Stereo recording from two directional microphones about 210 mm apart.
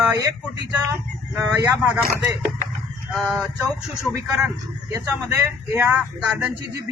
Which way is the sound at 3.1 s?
Centre (ahead or behind).